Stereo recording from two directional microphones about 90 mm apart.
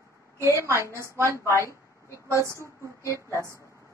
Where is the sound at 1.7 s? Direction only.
35° left (ahead or behind).